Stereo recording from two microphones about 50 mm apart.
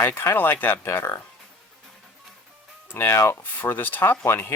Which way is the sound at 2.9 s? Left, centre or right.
Left.